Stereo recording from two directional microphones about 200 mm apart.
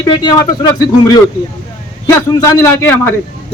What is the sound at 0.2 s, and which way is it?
A man's voice, 20° left (ahead or behind).